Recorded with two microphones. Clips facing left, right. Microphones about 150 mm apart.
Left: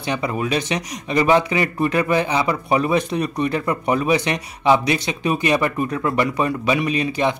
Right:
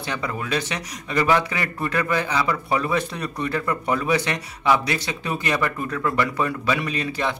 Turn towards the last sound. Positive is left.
turn(degrees=15)  # may be behind; listen again after turning